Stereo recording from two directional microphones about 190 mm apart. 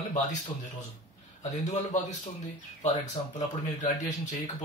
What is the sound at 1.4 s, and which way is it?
Speech, 40° left (ahead or behind).